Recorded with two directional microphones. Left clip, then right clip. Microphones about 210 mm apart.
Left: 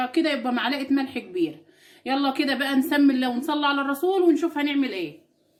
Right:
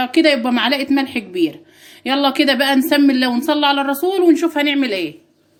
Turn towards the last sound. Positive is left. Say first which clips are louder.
# right 8 dB
turn(degrees=-50)  # may be behind; listen again after turning